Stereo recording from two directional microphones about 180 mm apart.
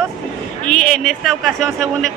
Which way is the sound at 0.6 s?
40° left (ahead or behind).